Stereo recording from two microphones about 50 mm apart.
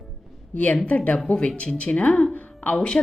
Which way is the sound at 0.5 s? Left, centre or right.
Left.